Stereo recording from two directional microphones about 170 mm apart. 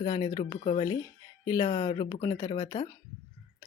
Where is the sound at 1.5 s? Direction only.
20° left (ahead or behind).